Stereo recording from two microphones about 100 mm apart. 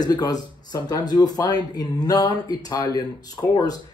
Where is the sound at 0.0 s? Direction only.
40° left (ahead or behind).